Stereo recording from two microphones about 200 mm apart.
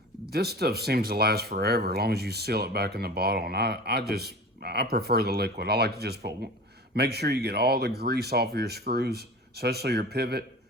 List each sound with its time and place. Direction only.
0.3 s speech: 55° right (ahead or behind)